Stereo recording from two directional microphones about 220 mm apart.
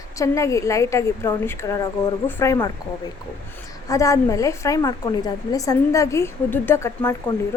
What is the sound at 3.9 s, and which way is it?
A woman's voice, 15° left (ahead or behind).